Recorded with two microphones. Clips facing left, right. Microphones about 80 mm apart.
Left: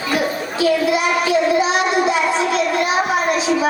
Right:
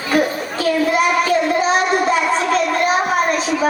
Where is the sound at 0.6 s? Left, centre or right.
Right.